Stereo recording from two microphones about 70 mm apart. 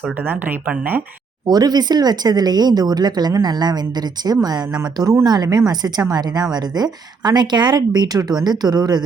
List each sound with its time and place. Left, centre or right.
0.0 s speech: right
1.5 s speech: right